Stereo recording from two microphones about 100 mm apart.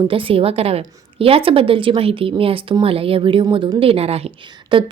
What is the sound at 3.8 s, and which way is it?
A woman's voice, 80° right.